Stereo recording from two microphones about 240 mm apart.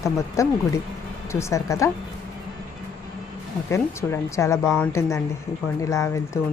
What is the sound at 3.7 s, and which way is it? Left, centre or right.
Speech, centre.